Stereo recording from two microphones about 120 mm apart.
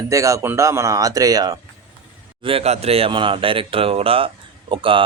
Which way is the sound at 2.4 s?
55° right (ahead or behind).